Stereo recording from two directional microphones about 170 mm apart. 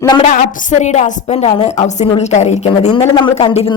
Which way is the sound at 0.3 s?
45° left (ahead or behind).